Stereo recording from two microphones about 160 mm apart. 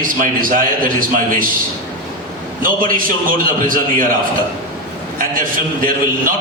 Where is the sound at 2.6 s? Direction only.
60° right (ahead or behind).